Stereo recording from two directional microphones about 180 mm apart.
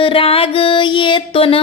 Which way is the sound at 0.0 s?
30° left (ahead or behind).